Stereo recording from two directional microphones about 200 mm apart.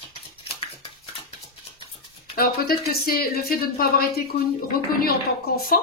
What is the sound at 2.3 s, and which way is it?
Speech, 50° left (ahead or behind).